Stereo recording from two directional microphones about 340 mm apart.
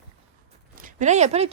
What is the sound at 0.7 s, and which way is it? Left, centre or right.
Speech, right.